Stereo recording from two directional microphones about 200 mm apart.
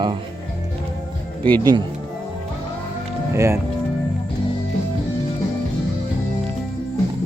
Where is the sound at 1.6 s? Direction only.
20° right (ahead or behind).